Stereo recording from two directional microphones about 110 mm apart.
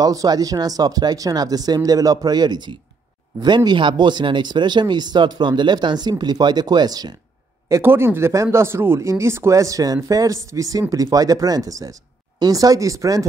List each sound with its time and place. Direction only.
0.0 s speech: 35° right (ahead or behind)
7.6 s speech: 25° right (ahead or behind)